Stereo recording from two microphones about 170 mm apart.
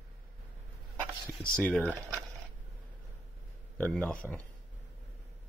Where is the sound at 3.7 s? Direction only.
10° left (ahead or behind).